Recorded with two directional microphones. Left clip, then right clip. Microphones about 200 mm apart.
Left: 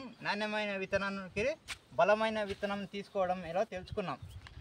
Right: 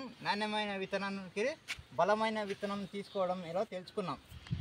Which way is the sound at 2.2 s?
Centre (ahead or behind).